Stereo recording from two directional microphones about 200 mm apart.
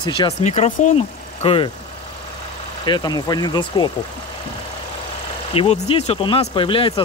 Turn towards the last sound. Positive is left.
turn(degrees=25)  # may be behind; listen again after turning